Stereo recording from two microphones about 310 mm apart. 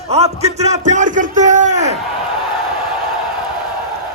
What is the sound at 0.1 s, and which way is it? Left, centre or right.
A man's voice, centre.